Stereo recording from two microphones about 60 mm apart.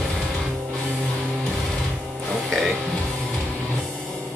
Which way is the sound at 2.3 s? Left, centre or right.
Centre.